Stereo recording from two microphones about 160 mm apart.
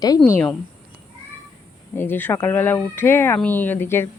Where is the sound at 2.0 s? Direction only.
10° left (ahead or behind).